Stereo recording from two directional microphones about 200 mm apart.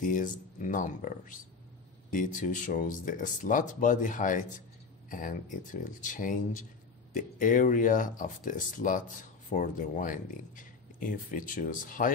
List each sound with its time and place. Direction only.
0.0 s speech: 40° left (ahead or behind)